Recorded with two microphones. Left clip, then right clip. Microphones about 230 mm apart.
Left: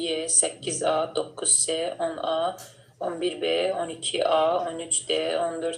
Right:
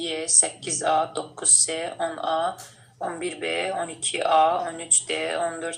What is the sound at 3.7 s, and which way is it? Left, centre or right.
Speech, right.